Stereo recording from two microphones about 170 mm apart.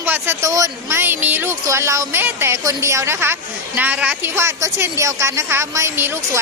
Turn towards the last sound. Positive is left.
turn(degrees=-15)  # may be behind; listen again after turning